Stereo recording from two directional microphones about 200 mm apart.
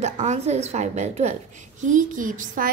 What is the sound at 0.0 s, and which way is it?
A woman's voice, 35° right (ahead or behind).